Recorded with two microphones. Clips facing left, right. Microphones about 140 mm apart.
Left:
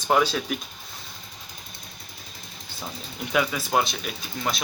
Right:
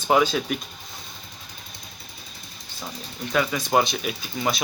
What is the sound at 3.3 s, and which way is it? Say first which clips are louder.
Speech: right 2 dB; 5° left (ahead or behind).